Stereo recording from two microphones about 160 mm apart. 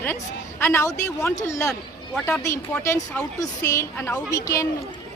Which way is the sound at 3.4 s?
20° left (ahead or behind).